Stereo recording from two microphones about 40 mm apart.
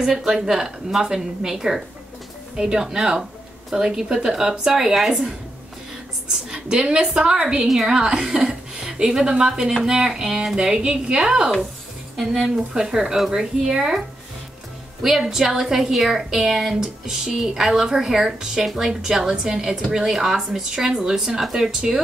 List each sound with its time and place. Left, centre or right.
0.0 s speech: centre
6.3 s a woman's voice: centre
7.6 s speech: centre
7.9 s speech: centre